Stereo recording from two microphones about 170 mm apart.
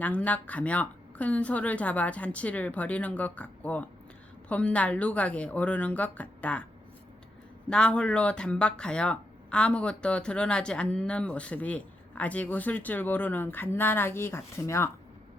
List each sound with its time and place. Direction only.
0.0 s speech: 10° left (ahead or behind)
7.7 s speech: 5° left (ahead or behind)